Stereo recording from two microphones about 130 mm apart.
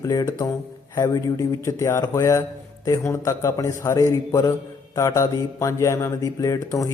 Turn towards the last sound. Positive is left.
turn(degrees=25)  # may be behind; listen again after turning